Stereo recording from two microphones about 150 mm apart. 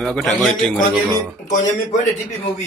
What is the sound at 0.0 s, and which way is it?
Speech, centre (ahead or behind).